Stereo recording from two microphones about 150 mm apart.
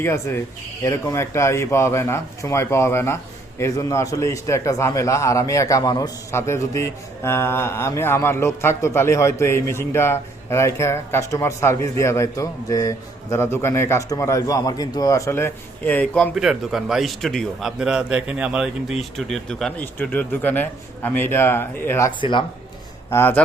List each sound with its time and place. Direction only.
0.0 s a man's voice: 15° left (ahead or behind)
16.3 s speech: centre (ahead or behind); by 22.1 s 15° left (ahead or behind)
22.2 s speech: 30° left (ahead or behind)
23.0 s a man's voice: 15° left (ahead or behind)